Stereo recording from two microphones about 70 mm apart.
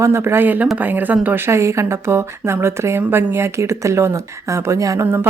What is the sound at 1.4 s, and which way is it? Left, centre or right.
Speech, right.